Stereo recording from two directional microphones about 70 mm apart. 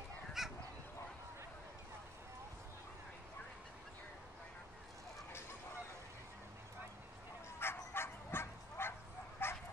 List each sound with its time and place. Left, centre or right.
0.4 s goose: centre
7.6 s bow-wow: left